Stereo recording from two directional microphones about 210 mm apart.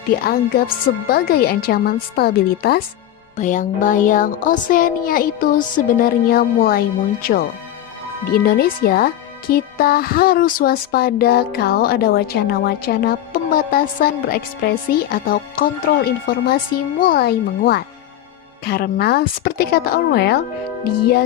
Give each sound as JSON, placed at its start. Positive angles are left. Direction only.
{"t": 1.0, "sound": "music", "side_deg": 45}
{"t": 3.3, "sound": "speech", "side_deg": 35}
{"t": 8.3, "sound": "music", "side_deg": 45}